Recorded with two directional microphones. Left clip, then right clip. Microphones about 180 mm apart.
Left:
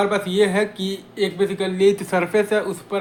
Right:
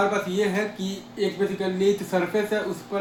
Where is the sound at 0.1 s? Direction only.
25° left (ahead or behind).